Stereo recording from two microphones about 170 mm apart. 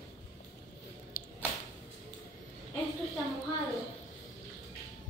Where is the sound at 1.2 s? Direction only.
55° left (ahead or behind).